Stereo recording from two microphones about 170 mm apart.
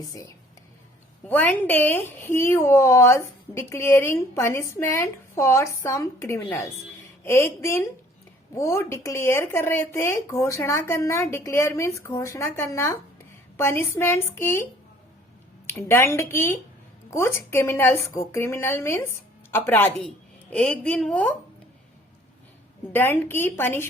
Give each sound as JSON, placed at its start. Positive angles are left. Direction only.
{"t": 1.3, "sound": "a woman's voice", "side_deg": 10}
{"t": 22.9, "sound": "a woman's voice", "side_deg": 10}